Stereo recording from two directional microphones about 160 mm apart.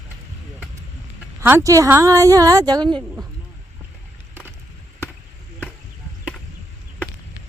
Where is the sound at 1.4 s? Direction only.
15° right (ahead or behind).